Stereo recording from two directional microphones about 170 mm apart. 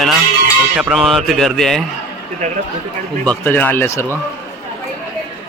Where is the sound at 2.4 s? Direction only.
45° right (ahead or behind).